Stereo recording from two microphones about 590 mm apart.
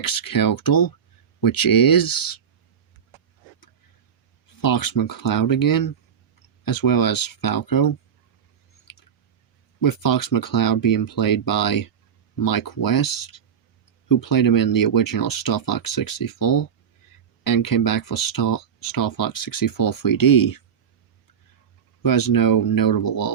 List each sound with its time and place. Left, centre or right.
0.0 s speech: left
4.5 s speech: left
9.8 s speech: left
22.0 s speech: left